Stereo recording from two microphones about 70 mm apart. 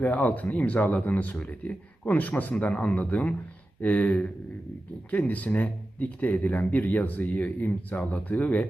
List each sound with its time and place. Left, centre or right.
0.0 s speech: left